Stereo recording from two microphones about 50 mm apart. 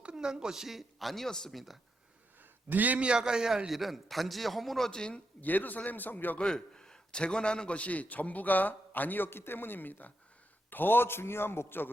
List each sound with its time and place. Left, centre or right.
0.0 s a woman's voice: centre
1.5 s a man's voice: centre
2.6 s a man's voice: right
3.1 s a man's voice: centre
4.9 s speech: centre
5.4 s a man's voice: left
6.4 s a man's voice: centre; by 11.9 s left